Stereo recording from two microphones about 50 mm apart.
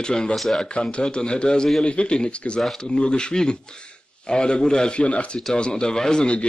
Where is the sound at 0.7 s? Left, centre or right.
Centre.